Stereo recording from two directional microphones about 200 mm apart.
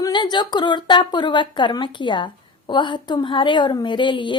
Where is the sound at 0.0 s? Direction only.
20° left (ahead or behind).